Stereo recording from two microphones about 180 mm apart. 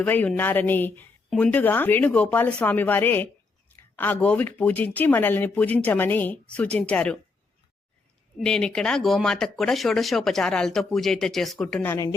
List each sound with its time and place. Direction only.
0.0 s a woman's voice: 5° left (ahead or behind)
8.4 s speech: 5° left (ahead or behind)